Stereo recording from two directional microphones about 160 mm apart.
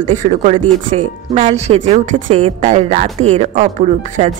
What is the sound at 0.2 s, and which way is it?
Speech, 45° right (ahead or behind).